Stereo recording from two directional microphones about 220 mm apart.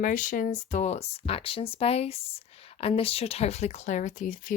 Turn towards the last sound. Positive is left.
turn(degrees=35)  # may be behind; listen again after turning